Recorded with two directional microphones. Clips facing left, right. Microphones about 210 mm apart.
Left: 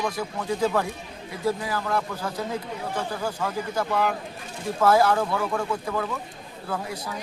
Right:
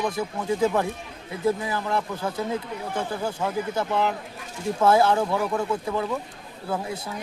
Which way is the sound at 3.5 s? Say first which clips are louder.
Right 2 dB; 20° right (ahead or behind).